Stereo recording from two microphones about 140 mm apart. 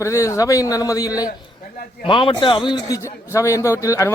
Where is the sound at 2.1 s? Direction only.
35° left (ahead or behind).